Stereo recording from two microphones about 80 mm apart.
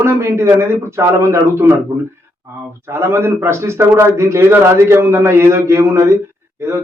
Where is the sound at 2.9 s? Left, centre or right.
Right.